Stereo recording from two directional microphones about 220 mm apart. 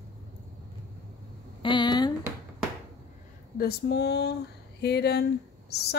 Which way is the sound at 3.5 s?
45° left (ahead or behind).